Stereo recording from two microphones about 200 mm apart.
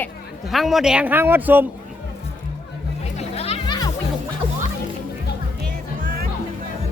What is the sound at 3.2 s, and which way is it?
Music, 30° left (ahead or behind).